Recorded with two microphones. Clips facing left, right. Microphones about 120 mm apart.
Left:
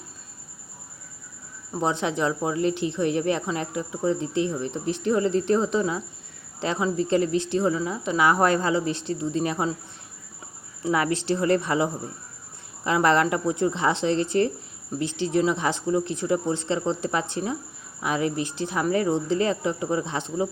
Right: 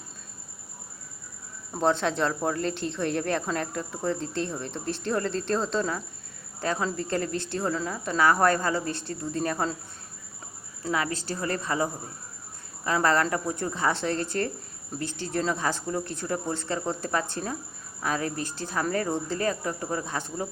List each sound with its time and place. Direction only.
1.8 s speech: 15° left (ahead or behind)
10.8 s speech: 25° left (ahead or behind)